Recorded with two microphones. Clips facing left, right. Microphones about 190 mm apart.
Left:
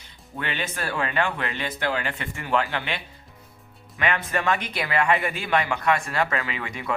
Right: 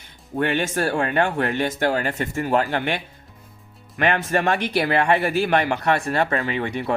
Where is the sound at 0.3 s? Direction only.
50° right (ahead or behind).